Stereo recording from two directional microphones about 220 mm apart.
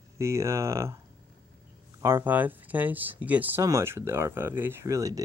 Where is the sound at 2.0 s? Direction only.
10° right (ahead or behind).